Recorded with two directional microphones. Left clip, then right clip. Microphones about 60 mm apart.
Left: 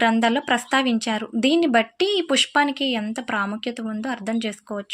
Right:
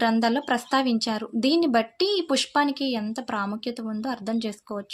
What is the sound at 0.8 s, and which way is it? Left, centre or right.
Speech, right.